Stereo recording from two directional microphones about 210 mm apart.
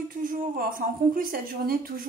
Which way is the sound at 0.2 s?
40° right (ahead or behind).